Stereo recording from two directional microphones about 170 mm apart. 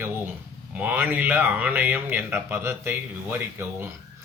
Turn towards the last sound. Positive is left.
turn(degrees=-15)  # may be behind; listen again after turning